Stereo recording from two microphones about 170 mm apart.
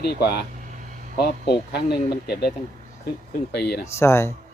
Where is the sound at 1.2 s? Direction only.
70° left (ahead or behind).